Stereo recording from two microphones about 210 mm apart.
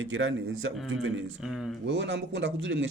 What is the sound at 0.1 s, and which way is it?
Speech, 70° right (ahead or behind).